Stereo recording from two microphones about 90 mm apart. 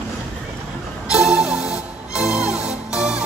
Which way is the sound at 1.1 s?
10° right (ahead or behind).